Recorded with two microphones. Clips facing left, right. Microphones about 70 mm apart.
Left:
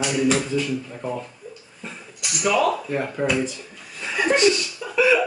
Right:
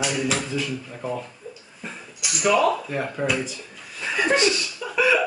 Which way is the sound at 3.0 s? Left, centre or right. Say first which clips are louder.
Left 1 dB; centre.